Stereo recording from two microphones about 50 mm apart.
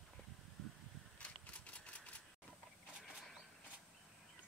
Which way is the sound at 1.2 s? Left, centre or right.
Left.